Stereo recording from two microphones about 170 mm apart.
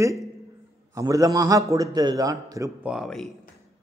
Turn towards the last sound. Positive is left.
turn(degrees=0)  # may be behind; listen again after turning